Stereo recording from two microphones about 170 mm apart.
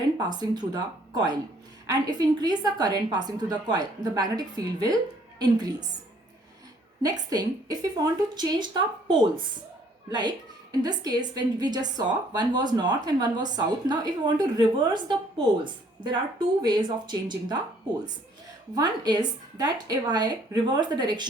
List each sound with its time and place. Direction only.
0.2 s a woman's voice: 25° right (ahead or behind)
7.0 s a woman's voice: 20° right (ahead or behind)
18.7 s a woman's voice: 25° right (ahead or behind)